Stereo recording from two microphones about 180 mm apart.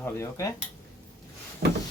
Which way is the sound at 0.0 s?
15° left (ahead or behind).